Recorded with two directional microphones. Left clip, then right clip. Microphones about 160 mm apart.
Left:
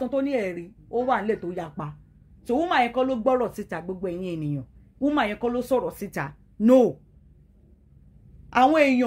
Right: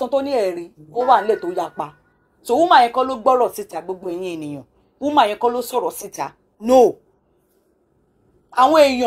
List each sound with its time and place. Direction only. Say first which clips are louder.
0.3 s speech: right 7 dB; 15° right (ahead or behind)
8.5 s speech: right 6 dB; 15° right (ahead or behind)